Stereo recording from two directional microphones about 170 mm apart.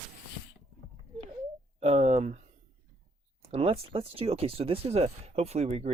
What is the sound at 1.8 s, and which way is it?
Speech, 40° right (ahead or behind).